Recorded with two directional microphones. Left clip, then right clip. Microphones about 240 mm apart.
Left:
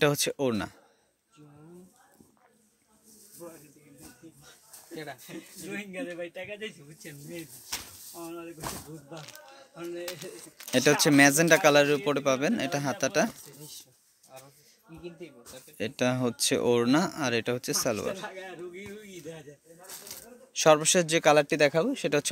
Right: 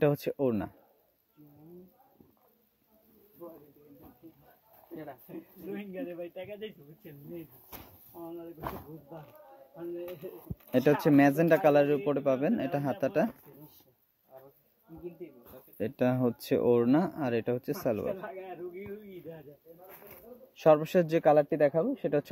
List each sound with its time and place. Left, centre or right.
0.0 s speech: centre
5.7 s a man's voice: left
10.7 s speech: centre
15.8 s speech: centre
20.6 s speech: centre